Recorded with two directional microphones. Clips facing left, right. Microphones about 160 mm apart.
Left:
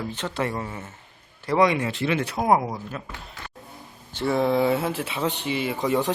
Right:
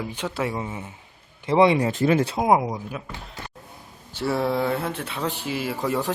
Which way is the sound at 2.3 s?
15° right (ahead or behind).